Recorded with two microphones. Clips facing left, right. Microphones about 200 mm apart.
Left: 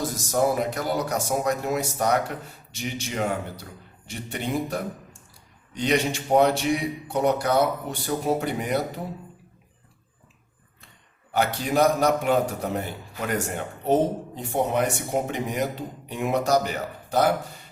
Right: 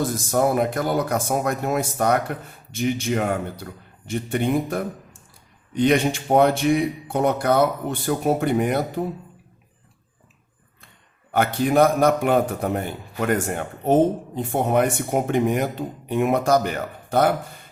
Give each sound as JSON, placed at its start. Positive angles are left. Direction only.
{"t": 0.0, "sound": "a man's voice", "side_deg": -55}
{"t": 11.3, "sound": "a man's voice", "side_deg": -55}